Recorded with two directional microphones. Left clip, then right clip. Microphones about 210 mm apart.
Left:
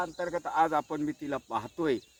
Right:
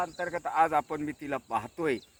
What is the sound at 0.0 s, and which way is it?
Speech, 20° right (ahead or behind).